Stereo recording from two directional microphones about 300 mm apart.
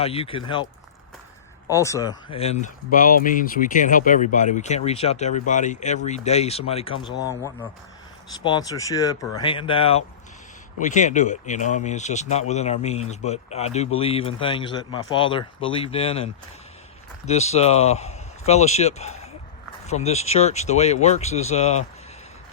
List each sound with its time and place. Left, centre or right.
0.0 s speech: centre